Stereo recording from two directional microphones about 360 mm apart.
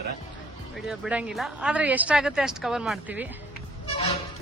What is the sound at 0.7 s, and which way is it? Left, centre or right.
Speech, centre.